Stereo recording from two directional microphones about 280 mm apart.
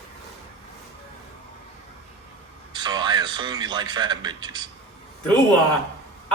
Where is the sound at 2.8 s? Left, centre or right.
Centre.